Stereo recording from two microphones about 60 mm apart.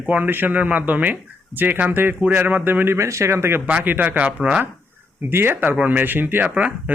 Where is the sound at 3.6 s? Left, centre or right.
Right.